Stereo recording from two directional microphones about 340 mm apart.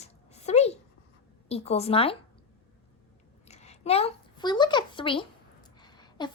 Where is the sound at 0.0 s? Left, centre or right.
Centre.